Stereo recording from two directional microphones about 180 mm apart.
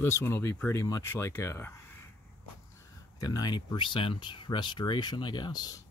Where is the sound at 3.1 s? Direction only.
20° left (ahead or behind).